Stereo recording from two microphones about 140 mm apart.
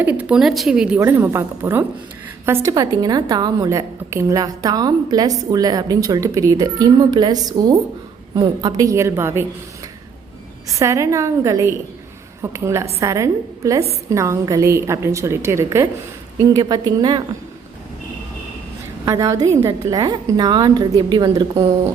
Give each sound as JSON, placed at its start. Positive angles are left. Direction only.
{"t": 0.0, "sound": "a woman's voice", "side_deg": -10}
{"t": 0.9, "sound": "a woman's voice", "side_deg": -15}
{"t": 10.8, "sound": "a woman's voice", "side_deg": -20}
{"t": 19.0, "sound": "a woman's voice", "side_deg": -25}